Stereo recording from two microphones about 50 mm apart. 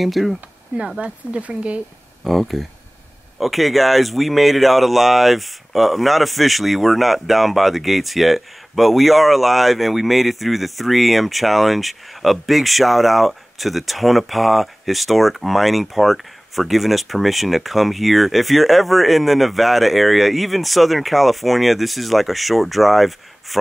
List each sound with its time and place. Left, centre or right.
0.0 s speech: centre
1.0 s speech: right
2.2 s speech: centre